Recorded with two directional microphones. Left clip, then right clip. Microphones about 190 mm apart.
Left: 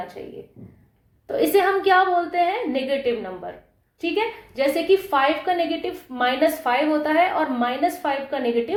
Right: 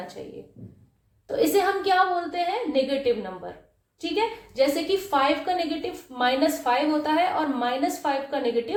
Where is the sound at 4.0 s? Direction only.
30° left (ahead or behind).